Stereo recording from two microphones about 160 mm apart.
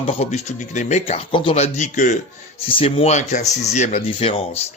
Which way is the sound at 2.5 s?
35° left (ahead or behind).